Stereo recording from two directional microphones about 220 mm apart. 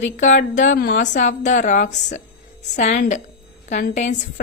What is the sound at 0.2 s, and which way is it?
A woman's voice, 35° left (ahead or behind).